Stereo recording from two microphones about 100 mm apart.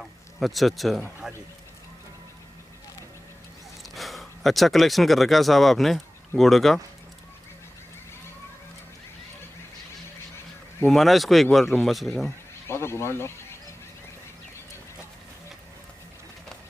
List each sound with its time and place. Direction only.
0.0 s a sound: centre (ahead or behind)
1.2 s speech: 5° right (ahead or behind)
3.9 s speech: centre (ahead or behind)
10.9 s speech: centre (ahead or behind)
12.6 s speech: 25° left (ahead or behind)